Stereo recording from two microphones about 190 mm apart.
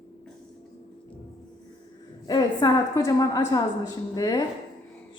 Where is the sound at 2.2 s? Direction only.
20° left (ahead or behind).